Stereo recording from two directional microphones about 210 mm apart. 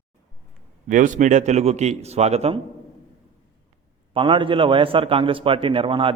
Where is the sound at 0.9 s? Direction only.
35° right (ahead or behind).